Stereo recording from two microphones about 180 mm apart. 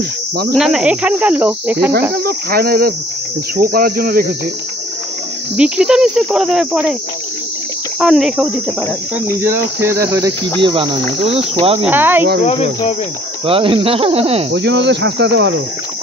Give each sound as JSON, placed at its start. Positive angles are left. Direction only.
{"t": 0.6, "sound": "cricket", "side_deg": -5}
{"t": 2.1, "sound": "cricket", "side_deg": -60}
{"t": 5.6, "sound": "cricket", "side_deg": -5}
{"t": 8.0, "sound": "cricket", "side_deg": 0}
{"t": 9.4, "sound": "cricket", "side_deg": -15}
{"t": 10.6, "sound": "speech", "side_deg": -25}
{"t": 11.8, "sound": "cricket", "side_deg": -10}
{"t": 12.4, "sound": "cricket", "side_deg": 35}
{"t": 13.5, "sound": "speech", "side_deg": -30}
{"t": 14.5, "sound": "cricket", "side_deg": -75}